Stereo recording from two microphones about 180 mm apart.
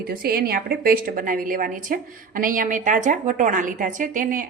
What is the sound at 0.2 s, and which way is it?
A woman's voice, 55° right (ahead or behind).